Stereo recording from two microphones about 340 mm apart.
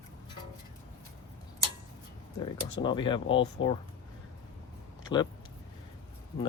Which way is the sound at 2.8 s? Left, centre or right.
Centre.